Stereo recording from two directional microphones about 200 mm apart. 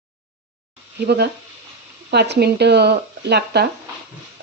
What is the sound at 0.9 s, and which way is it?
Speech, 55° right (ahead or behind).